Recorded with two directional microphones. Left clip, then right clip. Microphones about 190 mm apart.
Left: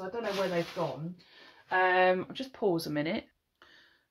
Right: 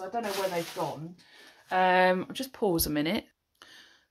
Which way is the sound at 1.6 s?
50° right (ahead or behind).